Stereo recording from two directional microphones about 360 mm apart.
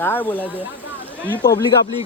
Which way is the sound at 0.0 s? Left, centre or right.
Centre.